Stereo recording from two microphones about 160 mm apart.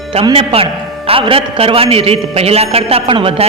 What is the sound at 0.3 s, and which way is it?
A man's voice, 35° right (ahead or behind).